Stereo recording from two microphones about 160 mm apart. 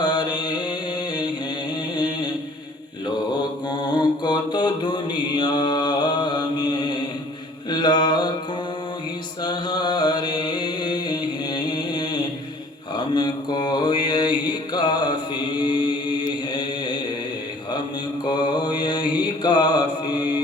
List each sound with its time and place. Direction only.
0.0 s mantra: 25° left (ahead or behind)
2.0 s chant: 25° left (ahead or behind)
3.7 s mantra: 25° left (ahead or behind)
9.4 s a sound: 25° left (ahead or behind)
13.1 s mantra: 25° left (ahead or behind)
15.5 s chant: 25° left (ahead or behind)
18.3 s mantra: 30° left (ahead or behind)